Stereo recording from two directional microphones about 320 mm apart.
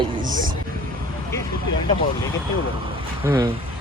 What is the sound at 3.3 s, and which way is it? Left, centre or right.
Speech, centre.